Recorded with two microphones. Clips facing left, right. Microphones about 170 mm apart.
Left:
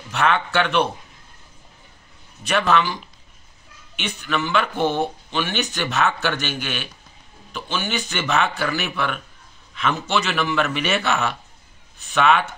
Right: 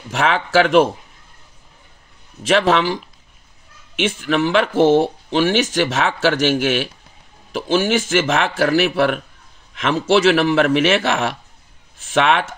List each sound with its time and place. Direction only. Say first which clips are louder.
0.1 s speech: right 4 dB; 90° right
2.4 s speech: right 4 dB; 90° right
12.1 s speech: right 2 dB; 80° right